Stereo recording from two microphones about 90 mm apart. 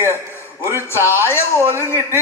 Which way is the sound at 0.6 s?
30° right (ahead or behind).